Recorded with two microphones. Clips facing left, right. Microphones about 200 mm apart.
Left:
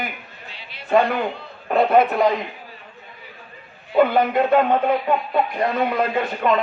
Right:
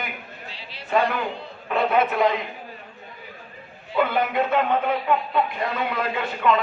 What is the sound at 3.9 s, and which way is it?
A man's voice, 50° left (ahead or behind).